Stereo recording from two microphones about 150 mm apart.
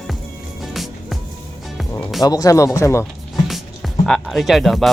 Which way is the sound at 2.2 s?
25° left (ahead or behind).